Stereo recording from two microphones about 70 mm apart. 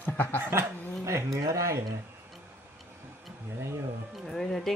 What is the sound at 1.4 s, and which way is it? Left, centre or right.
Speech, right.